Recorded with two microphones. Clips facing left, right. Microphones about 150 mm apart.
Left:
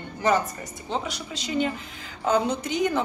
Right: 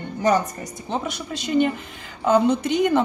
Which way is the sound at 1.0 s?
55° right (ahead or behind).